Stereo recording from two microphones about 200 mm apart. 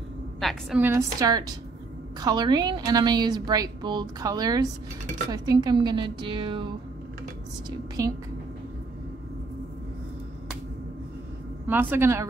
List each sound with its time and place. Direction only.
0.4 s a woman's voice: centre (ahead or behind)
0.8 s a woman's voice: 15° right (ahead or behind)
8.0 s a woman's voice: 15° right (ahead or behind)
11.6 s a woman's voice: 10° right (ahead or behind)